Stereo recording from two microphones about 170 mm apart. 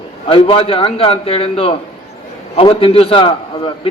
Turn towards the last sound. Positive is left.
turn(degrees=30)  # may be behind; listen again after turning